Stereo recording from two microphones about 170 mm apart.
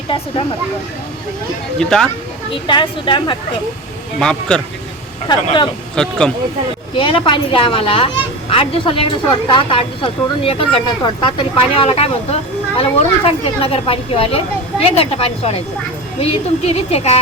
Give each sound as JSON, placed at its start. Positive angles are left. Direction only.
{"t": 1.8, "sound": "speech", "side_deg": 5}
{"t": 2.6, "sound": "a woman's voice", "side_deg": 30}
{"t": 4.2, "sound": "speech", "side_deg": 5}
{"t": 5.3, "sound": "a woman's voice", "side_deg": 25}
{"t": 6.0, "sound": "speech", "side_deg": 5}
{"t": 6.9, "sound": "speech", "side_deg": 30}